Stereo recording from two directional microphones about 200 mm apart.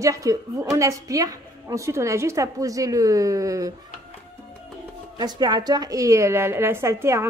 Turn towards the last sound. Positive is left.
turn(degrees=-15)  # may be behind; listen again after turning